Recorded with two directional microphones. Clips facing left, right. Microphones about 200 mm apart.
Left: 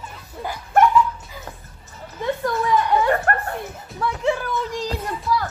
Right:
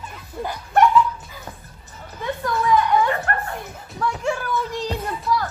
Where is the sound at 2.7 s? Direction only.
45° left (ahead or behind).